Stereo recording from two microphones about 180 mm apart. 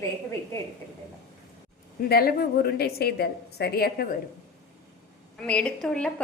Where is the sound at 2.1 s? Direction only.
60° left (ahead or behind).